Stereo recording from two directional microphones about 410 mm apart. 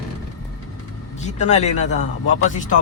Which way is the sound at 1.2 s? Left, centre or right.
Centre.